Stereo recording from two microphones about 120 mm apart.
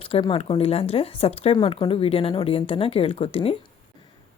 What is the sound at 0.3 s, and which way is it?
Speech, 55° left (ahead or behind).